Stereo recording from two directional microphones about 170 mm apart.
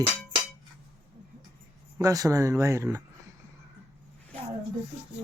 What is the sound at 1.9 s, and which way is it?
Speech, 20° right (ahead or behind).